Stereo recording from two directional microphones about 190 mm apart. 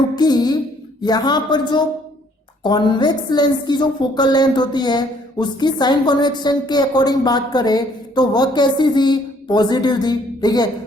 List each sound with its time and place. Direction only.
0.2 s a woman's voice: 20° left (ahead or behind)